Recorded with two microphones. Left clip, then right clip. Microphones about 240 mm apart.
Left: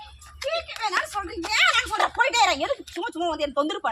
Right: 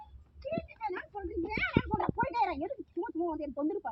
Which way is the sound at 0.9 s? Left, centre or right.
Left.